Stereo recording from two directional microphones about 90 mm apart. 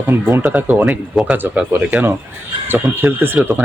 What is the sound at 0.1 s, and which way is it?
Speech, 25° right (ahead or behind).